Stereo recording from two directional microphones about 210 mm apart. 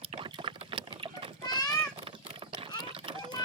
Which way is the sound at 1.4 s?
20° left (ahead or behind).